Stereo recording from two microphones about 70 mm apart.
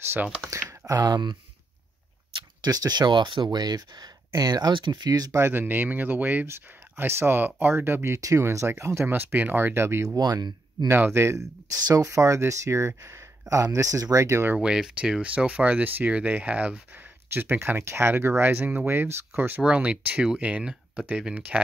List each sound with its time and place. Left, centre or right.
0.4 s speech: right
2.6 s speech: right
5.4 s speech: right
6.4 s speech: right
10.0 s speech: right
10.9 s speech: right
14.6 s speech: centre; by 19.6 s right
19.6 s speech: centre